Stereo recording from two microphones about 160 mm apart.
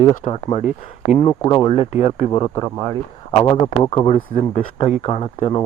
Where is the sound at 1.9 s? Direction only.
45° left (ahead or behind).